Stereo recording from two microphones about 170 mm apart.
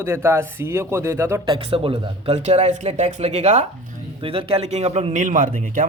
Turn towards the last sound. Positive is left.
turn(degrees=-50)  # may be behind; listen again after turning